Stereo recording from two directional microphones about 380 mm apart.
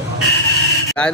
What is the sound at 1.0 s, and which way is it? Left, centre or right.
Speech, centre.